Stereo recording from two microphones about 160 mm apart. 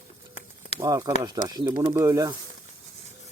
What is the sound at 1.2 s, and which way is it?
Speech, 25° right (ahead or behind).